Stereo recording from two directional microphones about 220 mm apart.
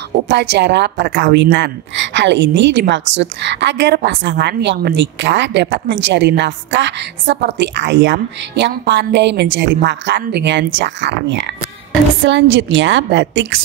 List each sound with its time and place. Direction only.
0.3 s a woman's voice: 50° right (ahead or behind)